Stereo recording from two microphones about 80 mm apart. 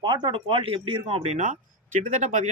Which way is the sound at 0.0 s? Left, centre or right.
Right.